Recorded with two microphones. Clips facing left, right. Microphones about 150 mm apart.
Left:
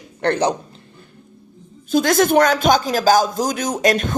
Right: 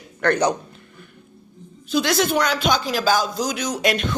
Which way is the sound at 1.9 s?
45° left (ahead or behind).